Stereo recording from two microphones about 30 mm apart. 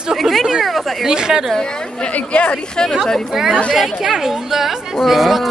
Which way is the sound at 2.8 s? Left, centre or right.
Left.